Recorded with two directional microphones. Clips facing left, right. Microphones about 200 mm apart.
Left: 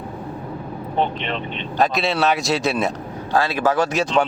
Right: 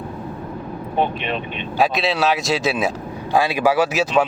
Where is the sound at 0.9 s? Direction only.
15° right (ahead or behind).